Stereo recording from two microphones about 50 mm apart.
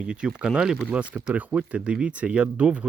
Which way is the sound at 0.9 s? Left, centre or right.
Right.